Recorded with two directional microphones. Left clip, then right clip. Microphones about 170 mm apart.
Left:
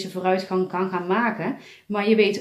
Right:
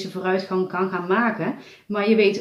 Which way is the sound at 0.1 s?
35° left (ahead or behind).